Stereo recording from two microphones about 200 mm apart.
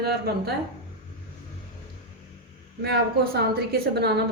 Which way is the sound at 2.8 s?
55° right (ahead or behind).